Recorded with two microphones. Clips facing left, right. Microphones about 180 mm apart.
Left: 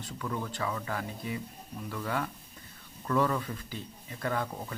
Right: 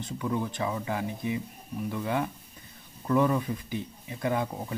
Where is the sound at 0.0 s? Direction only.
15° right (ahead or behind).